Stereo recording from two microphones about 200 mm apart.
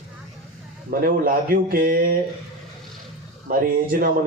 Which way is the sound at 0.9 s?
45° right (ahead or behind).